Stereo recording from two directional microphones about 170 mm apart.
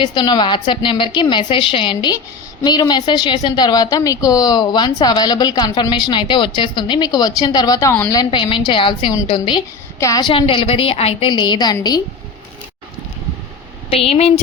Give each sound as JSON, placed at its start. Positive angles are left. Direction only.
{"t": 0.0, "sound": "a woman's voice", "side_deg": 25}
{"t": 10.0, "sound": "a woman's voice", "side_deg": 20}
{"t": 13.9, "sound": "a woman's voice", "side_deg": 35}